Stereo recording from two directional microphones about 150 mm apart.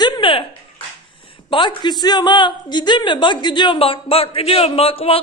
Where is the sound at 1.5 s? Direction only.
30° left (ahead or behind).